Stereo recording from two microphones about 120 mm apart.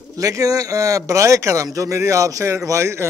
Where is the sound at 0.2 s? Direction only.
25° right (ahead or behind).